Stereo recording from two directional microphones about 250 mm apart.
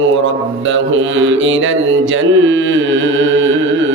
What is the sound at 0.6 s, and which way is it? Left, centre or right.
Mantra, right.